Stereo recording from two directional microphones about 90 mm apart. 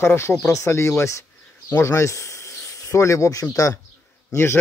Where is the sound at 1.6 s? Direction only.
30° left (ahead or behind).